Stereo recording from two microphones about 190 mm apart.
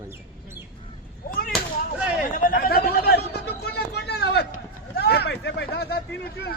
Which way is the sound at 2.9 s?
55° left (ahead or behind).